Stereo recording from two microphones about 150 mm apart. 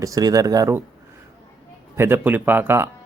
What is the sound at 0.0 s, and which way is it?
Speech, 25° right (ahead or behind).